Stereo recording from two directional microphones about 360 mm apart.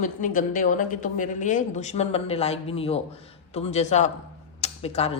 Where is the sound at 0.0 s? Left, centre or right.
Left.